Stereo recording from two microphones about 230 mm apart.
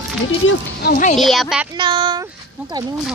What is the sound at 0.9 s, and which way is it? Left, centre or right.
Speech, left.